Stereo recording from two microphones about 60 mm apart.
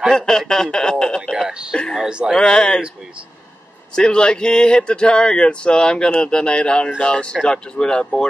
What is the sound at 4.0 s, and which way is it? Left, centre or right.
A man's voice, centre.